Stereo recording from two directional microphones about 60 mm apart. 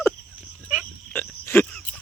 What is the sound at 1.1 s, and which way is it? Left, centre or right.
Frog, left.